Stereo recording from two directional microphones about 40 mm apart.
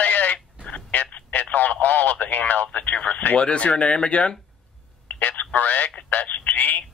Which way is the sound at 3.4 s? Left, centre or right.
Left.